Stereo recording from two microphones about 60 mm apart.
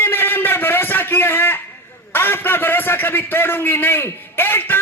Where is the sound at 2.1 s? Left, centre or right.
Left.